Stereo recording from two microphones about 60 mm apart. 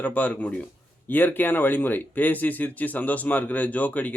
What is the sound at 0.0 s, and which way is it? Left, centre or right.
Speech, left.